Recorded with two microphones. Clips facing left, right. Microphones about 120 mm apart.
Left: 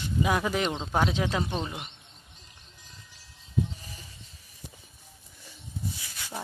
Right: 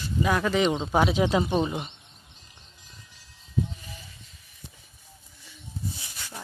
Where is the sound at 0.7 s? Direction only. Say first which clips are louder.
Right 4 dB; 5° right (ahead or behind).